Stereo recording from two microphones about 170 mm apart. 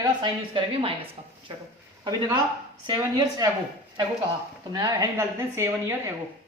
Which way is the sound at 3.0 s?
20° right (ahead or behind).